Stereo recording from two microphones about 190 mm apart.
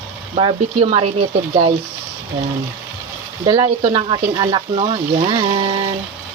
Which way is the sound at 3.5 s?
30° right (ahead or behind).